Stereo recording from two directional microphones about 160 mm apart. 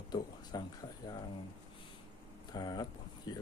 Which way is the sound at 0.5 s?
25° left (ahead or behind).